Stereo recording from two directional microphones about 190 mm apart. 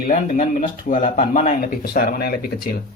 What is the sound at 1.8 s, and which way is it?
Speech, 50° left (ahead or behind).